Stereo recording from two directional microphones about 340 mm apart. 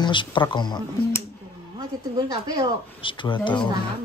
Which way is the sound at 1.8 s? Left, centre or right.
Centre.